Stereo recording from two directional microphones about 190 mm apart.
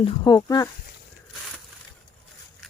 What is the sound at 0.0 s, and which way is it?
Speech, 20° left (ahead or behind).